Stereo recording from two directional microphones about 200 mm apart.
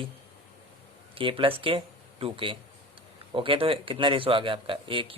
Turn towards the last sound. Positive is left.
turn(degrees=-25)  # may be behind; listen again after turning